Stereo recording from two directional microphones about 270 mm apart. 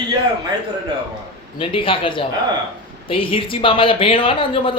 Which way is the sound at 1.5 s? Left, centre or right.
Centre.